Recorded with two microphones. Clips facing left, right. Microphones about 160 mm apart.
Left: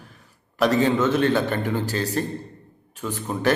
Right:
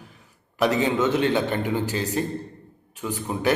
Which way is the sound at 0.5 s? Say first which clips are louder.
Left 2 dB; 15° right (ahead or behind).